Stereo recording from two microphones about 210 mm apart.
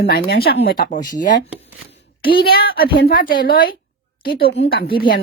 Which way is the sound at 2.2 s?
45° left (ahead or behind).